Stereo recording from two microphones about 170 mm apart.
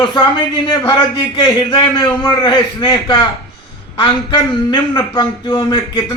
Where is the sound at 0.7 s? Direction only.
25° left (ahead or behind).